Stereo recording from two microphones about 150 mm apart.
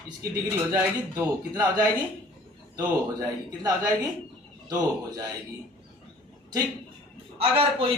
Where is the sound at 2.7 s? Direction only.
25° right (ahead or behind).